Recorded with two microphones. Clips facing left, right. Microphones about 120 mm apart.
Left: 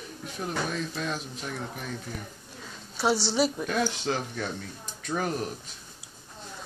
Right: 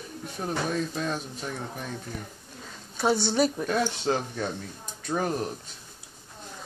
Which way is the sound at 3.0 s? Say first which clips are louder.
Right 1 dB; 50° right (ahead or behind).